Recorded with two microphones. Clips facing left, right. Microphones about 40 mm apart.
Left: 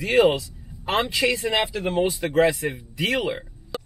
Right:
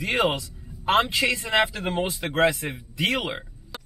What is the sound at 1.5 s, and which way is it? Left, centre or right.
Speech, right.